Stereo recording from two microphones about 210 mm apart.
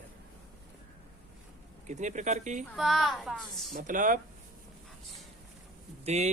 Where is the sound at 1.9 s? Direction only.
35° right (ahead or behind).